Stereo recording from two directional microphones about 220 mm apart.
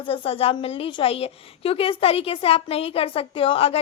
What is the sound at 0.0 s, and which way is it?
A woman's voice, 25° left (ahead or behind).